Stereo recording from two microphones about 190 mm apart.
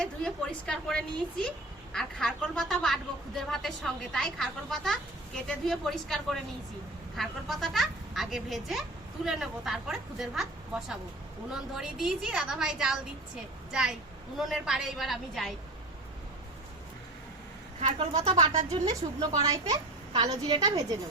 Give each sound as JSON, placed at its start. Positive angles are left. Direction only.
{"t": 0.0, "sound": "a woman's voice", "side_deg": 5}
{"t": 17.7, "sound": "speech", "side_deg": -35}
{"t": 19.5, "sound": "a woman's voice", "side_deg": -20}